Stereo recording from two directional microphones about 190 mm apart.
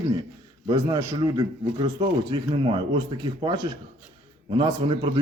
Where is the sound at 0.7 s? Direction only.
20° right (ahead or behind).